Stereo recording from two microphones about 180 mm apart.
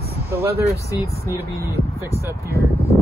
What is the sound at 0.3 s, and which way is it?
Speech, 10° right (ahead or behind).